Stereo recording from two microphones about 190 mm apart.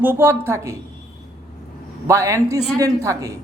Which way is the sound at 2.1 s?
15° right (ahead or behind).